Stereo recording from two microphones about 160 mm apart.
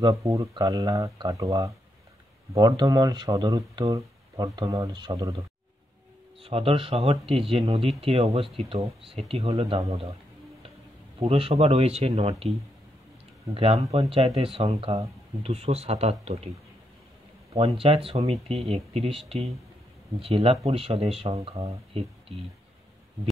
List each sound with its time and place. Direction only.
0.0 s speech: 20° right (ahead or behind)
6.4 s speech: 35° right (ahead or behind)
11.1 s speech: 35° right (ahead or behind)
14.1 s speech: 35° right (ahead or behind)
17.6 s speech: 35° right (ahead or behind)